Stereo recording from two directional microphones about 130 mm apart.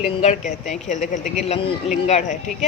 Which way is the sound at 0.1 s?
55° left (ahead or behind).